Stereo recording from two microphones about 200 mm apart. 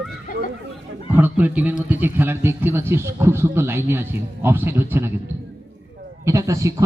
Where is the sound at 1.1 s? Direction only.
10° right (ahead or behind).